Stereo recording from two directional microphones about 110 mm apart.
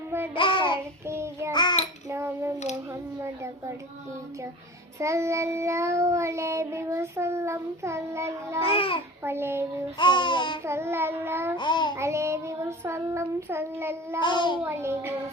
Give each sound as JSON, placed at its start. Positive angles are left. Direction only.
{"t": 0.3, "sound": "child singing", "side_deg": 50}
{"t": 1.0, "sound": "child singing", "side_deg": -25}
{"t": 2.0, "sound": "a sound", "side_deg": -25}
{"t": 4.9, "sound": "child singing", "side_deg": -25}
{"t": 8.6, "sound": "a child's voice", "side_deg": 60}
{"t": 9.2, "sound": "child singing", "side_deg": -20}
{"t": 10.0, "sound": "speech", "side_deg": 45}
{"t": 10.6, "sound": "child singing", "side_deg": -25}
{"t": 11.5, "sound": "speech", "side_deg": 45}
{"t": 11.9, "sound": "child singing", "side_deg": -25}
{"t": 14.2, "sound": "speech", "side_deg": 45}
{"t": 14.6, "sound": "child singing", "side_deg": -20}